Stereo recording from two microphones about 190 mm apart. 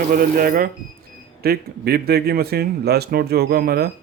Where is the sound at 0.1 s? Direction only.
50° right (ahead or behind).